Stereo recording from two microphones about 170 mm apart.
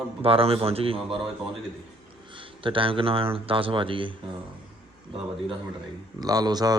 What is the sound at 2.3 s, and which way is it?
Speech, 30° right (ahead or behind).